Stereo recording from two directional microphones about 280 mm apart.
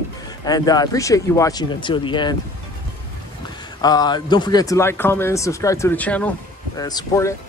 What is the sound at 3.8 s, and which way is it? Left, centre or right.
Speech, centre.